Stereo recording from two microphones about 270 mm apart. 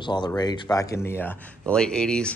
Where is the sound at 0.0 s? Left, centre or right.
Centre.